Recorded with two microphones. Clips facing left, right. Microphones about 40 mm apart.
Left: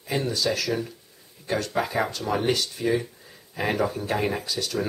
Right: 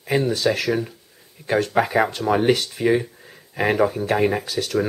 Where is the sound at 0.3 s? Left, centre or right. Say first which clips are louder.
Right 5 dB; right.